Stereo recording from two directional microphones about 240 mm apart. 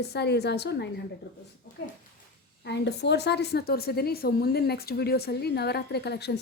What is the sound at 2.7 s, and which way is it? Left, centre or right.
A woman's voice, left.